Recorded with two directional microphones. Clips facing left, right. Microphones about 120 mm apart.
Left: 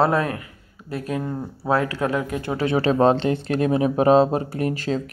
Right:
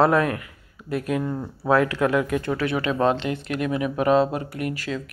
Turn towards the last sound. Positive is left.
turn(degrees=30)  # may be behind; listen again after turning